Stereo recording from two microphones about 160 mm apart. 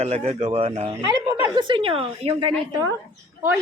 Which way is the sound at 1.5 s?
30° right (ahead or behind).